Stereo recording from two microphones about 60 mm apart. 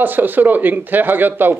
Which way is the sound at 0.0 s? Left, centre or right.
Right.